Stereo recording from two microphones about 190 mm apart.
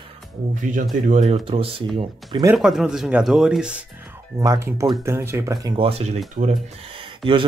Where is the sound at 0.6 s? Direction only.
40° right (ahead or behind); by 2.5 s 25° right (ahead or behind).